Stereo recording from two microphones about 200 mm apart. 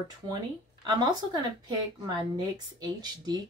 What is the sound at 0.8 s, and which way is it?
Speech, 20° right (ahead or behind).